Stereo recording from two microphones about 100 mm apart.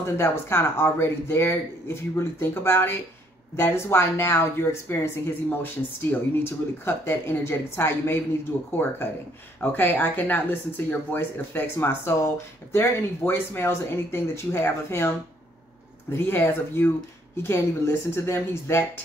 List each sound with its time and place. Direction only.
0.0 s speech: 25° left (ahead or behind)